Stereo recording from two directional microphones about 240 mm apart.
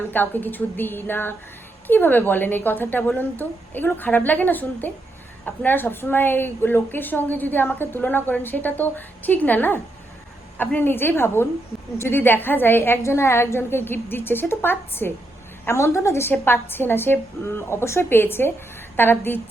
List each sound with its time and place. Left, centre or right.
0.1 s a woman's voice: centre